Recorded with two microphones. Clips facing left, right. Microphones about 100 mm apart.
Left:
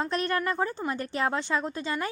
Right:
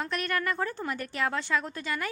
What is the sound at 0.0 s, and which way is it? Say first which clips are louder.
A woman's voice: left 3 dB; 30° left (ahead or behind).